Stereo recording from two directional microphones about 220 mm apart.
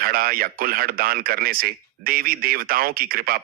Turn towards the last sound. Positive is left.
turn(degrees=-40)  # may be behind; listen again after turning